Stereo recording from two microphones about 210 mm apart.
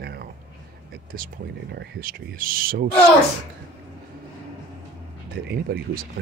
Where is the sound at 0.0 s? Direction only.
50° right (ahead or behind).